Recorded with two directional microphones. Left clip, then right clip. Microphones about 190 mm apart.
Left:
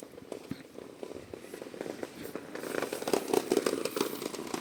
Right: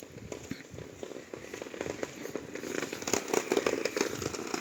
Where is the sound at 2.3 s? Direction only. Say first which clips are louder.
Even; 50° left (ahead or behind); by 3.9 s 65° left (ahead or behind).